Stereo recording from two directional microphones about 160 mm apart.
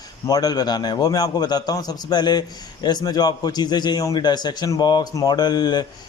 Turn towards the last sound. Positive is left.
turn(degrees=25)  # may be behind; listen again after turning